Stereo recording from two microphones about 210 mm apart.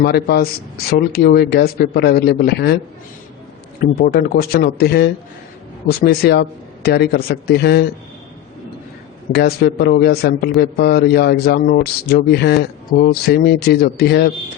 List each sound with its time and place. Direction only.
0.0 s speech: 50° left (ahead or behind)
3.8 s speech: 45° left (ahead or behind)
9.3 s speech: 50° left (ahead or behind)